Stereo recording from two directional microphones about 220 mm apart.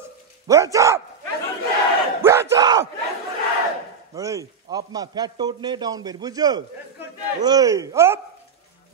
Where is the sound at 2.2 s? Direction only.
10° right (ahead or behind).